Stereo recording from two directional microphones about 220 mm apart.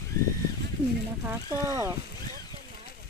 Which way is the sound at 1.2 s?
15° right (ahead or behind).